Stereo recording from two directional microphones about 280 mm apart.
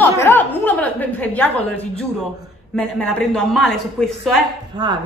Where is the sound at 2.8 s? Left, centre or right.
Centre.